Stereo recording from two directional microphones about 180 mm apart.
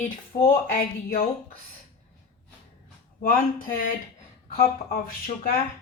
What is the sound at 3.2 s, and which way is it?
Speech, 50° left (ahead or behind).